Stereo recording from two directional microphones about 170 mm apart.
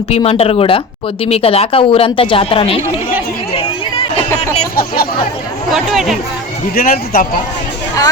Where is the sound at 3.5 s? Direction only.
30° left (ahead or behind).